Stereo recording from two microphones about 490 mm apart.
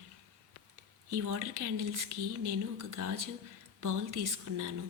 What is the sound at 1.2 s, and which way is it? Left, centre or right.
Speech, right.